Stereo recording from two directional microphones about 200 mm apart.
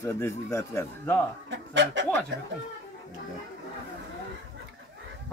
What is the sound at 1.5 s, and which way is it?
Speech, 65° right (ahead or behind).